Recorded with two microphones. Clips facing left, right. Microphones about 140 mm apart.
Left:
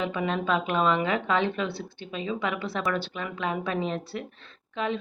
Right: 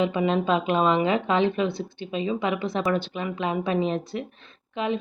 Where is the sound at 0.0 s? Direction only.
20° right (ahead or behind).